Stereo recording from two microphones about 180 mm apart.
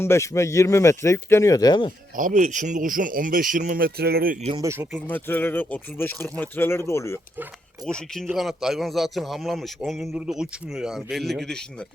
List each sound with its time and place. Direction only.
0.0 s speech: 15° left (ahead or behind)
2.1 s speech: 45° right (ahead or behind)
4.6 s speech: 15° right (ahead or behind)
5.0 s speech: 10° left (ahead or behind)
7.9 s a man's voice: 5° left (ahead or behind)